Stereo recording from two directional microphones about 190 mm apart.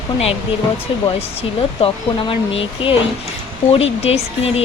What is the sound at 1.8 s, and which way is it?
Speech, 30° left (ahead or behind).